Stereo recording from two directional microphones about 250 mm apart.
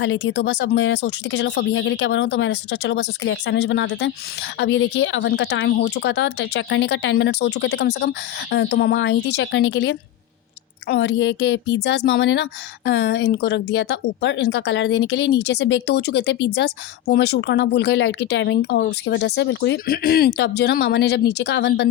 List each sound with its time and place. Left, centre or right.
0.0 s speech: left